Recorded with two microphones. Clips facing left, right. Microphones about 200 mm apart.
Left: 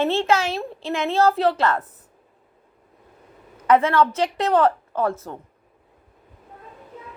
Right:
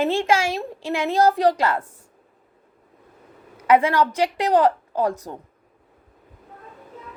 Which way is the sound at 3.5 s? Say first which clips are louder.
Even; 10° right (ahead or behind).